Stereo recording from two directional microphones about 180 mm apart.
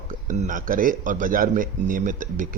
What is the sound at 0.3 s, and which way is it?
A man's voice, 45° right (ahead or behind).